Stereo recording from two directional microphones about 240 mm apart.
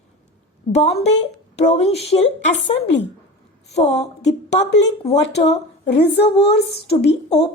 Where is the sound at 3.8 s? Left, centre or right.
Left.